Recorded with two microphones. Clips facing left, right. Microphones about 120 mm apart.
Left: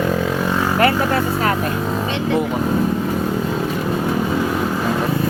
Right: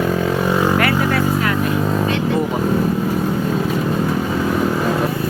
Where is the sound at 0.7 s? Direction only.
30° left (ahead or behind).